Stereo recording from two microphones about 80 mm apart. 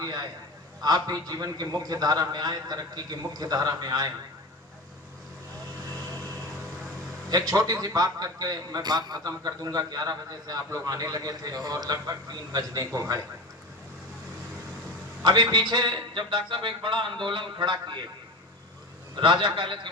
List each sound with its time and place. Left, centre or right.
0.0 s a man's voice: right
7.3 s a man's voice: right
15.2 s a man's voice: right
19.1 s a man's voice: right